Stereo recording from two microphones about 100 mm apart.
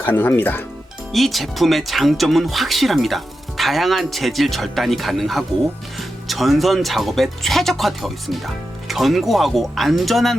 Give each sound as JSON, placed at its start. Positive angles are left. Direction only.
{"t": 0.0, "sound": "speech", "side_deg": 20}
{"t": 1.1, "sound": "speech", "side_deg": 0}